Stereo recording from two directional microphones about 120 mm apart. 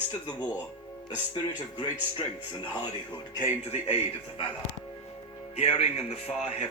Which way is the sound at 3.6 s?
60° left (ahead or behind).